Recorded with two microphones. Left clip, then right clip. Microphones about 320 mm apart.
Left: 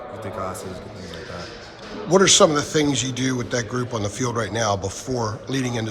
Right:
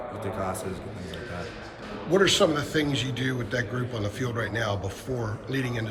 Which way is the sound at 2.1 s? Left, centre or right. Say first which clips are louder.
Left 6 dB; centre.